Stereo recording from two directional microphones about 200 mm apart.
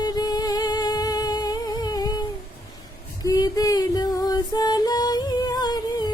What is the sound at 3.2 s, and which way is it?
Music, 20° left (ahead or behind).